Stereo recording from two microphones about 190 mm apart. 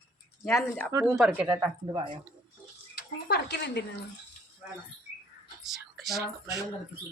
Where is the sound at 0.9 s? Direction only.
15° right (ahead or behind).